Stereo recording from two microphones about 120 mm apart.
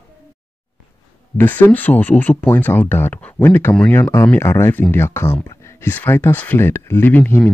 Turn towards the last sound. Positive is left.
turn(degrees=15)  # may be behind; listen again after turning